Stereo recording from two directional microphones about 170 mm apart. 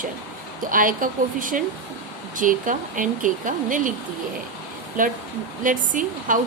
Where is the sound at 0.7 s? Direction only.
55° right (ahead or behind).